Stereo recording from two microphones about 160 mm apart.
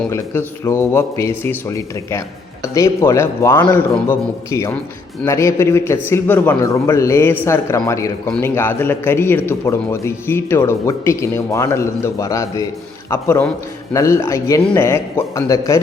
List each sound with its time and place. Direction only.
0.1 s a man's voice: 15° left (ahead or behind)